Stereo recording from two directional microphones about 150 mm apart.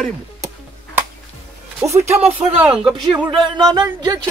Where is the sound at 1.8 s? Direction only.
20° right (ahead or behind).